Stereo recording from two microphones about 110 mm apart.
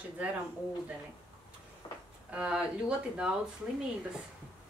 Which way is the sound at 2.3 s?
10° right (ahead or behind).